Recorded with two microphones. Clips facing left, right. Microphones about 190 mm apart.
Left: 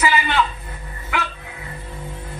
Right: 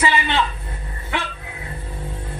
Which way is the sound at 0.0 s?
25° right (ahead or behind).